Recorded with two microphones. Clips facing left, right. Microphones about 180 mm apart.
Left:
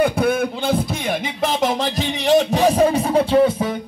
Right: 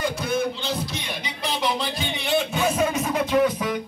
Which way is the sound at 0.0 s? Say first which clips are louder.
Left 7 dB; 55° left (ahead or behind).